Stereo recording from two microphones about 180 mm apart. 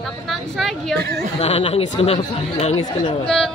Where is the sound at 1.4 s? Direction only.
35° left (ahead or behind).